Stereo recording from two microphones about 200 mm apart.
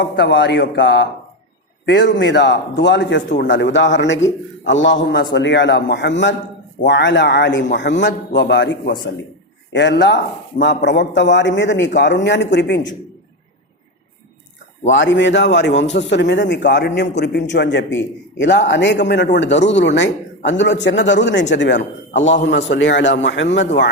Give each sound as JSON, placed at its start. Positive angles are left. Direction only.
{"t": 0.0, "sound": "a man's voice", "side_deg": 65}
{"t": 9.7, "sound": "a man's voice", "side_deg": 60}
{"t": 14.8, "sound": "a man's voice", "side_deg": 65}
{"t": 22.2, "sound": "a man's voice", "side_deg": 35}
{"t": 22.4, "sound": "a man's voice", "side_deg": 65}